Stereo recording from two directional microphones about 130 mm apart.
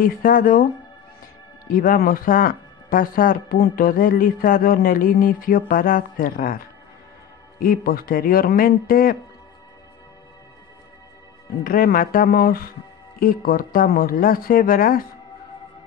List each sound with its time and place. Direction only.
0.0 s speech: 90° left
1.7 s speech: 90° left
11.6 s speech: 90° left